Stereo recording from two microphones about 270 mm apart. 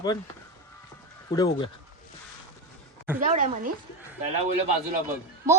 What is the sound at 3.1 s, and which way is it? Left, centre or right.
Speech, right.